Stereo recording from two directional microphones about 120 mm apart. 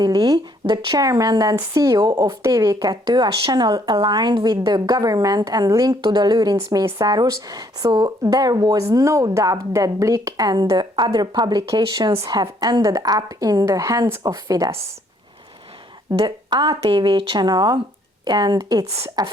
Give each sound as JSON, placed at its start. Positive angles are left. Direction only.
{"t": 0.0, "sound": "speech", "side_deg": -30}
{"t": 6.0, "sound": "speech", "side_deg": -40}
{"t": 16.1, "sound": "speech", "side_deg": -40}